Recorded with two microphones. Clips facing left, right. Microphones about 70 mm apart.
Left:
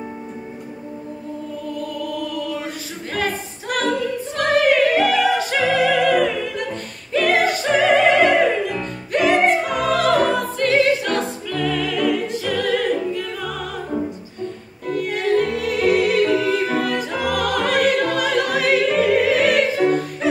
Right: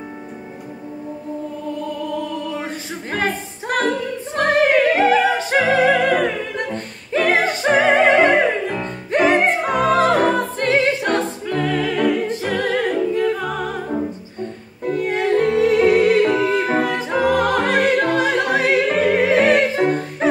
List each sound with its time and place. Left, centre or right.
2.1 s choir: right
14.9 s music: right